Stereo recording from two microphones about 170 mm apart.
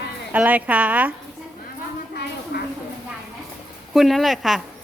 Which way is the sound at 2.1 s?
70° left (ahead or behind).